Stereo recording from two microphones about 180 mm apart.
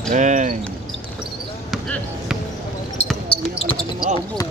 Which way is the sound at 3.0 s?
40° left (ahead or behind).